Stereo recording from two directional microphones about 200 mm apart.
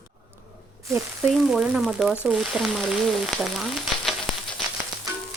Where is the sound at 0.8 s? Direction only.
15° right (ahead or behind).